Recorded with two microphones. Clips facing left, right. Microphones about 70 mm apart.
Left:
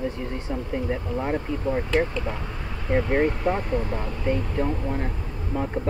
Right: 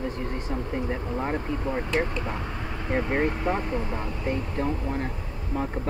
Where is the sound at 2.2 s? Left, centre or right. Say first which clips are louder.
Left 1 dB; right.